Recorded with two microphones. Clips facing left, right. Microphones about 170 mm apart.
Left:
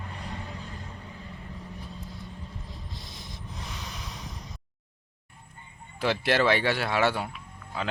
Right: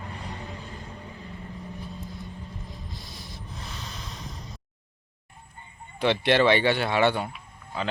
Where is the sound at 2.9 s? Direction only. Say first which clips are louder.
Right 1 dB; 25° left (ahead or behind).